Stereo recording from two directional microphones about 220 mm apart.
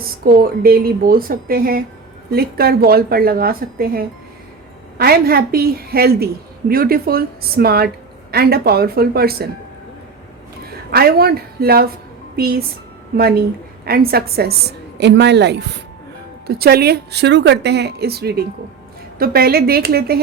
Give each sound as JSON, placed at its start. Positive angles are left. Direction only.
{"t": 0.2, "sound": "a woman's voice", "side_deg": -45}
{"t": 10.9, "sound": "a woman's voice", "side_deg": -45}